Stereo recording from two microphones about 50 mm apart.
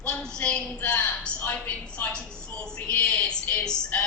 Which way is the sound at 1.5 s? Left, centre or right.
Left.